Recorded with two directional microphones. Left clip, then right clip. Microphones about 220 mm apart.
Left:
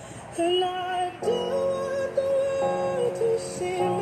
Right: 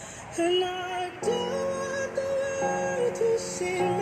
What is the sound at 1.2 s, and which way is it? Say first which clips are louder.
Music: left 2 dB; 45° right (ahead or behind).